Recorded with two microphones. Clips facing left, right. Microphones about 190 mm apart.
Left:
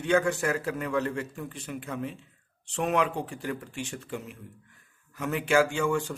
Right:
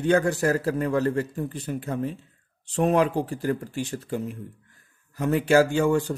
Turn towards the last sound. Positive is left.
turn(degrees=-40)  # may be behind; listen again after turning